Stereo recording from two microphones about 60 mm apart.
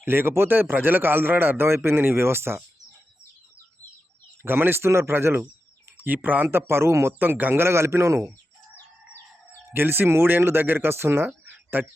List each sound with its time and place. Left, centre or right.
0.0 s speech: right
4.4 s speech: right
6.0 s speech: right
7.2 s speech: right
7.6 s a man's voice: right
9.7 s speech: right
11.4 s a sound: right